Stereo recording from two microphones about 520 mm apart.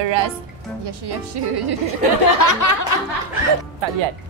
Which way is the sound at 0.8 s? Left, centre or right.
Right.